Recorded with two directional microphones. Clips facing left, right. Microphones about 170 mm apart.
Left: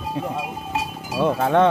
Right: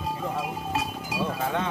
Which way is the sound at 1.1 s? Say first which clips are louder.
Left 11 dB; 65° left (ahead or behind).